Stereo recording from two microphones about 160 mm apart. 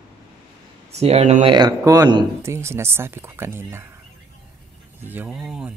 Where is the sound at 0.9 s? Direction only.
40° right (ahead or behind).